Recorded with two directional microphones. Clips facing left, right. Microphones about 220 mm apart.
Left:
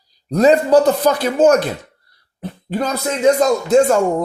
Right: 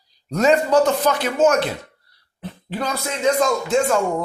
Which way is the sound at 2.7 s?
45° left (ahead or behind).